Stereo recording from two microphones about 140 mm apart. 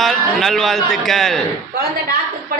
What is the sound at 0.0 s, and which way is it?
A man's voice, centre (ahead or behind).